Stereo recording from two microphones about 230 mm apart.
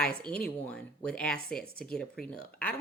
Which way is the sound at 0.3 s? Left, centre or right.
Centre.